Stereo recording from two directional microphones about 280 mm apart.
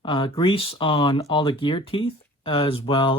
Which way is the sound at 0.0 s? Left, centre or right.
Centre.